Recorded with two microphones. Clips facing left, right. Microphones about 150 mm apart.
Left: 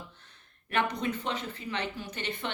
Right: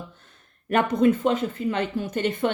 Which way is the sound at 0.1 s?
45° right (ahead or behind).